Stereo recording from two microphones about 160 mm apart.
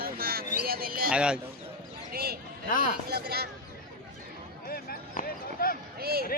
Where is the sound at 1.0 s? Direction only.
5° right (ahead or behind).